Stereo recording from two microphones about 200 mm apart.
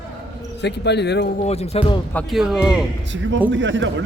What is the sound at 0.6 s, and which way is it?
Speech, 60° left (ahead or behind).